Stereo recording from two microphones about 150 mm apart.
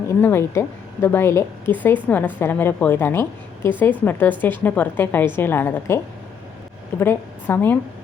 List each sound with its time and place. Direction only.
0.1 s a woman's voice: 15° left (ahead or behind)
7.0 s a woman's voice: 15° left (ahead or behind)